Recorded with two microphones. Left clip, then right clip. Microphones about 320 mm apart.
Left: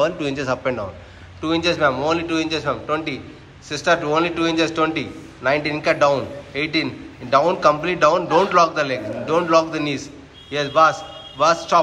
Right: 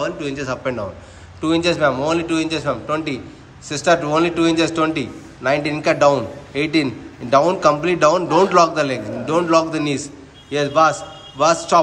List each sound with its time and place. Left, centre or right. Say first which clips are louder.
0.5 s a man's voice: even; centre